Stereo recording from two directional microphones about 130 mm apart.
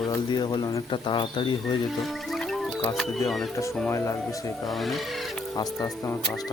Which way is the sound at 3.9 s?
20° left (ahead or behind).